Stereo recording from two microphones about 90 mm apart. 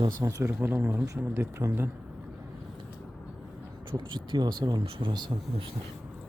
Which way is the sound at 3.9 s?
60° right (ahead or behind).